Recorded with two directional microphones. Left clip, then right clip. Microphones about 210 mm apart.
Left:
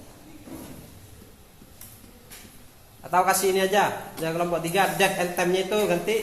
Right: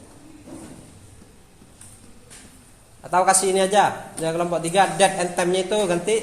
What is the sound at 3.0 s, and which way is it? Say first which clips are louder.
A man's voice: right 3 dB; 45° right (ahead or behind).